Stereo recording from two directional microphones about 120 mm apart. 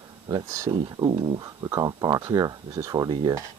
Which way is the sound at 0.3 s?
30° right (ahead or behind).